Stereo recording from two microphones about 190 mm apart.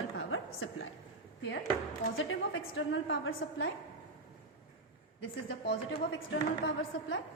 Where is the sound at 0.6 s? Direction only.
90° left.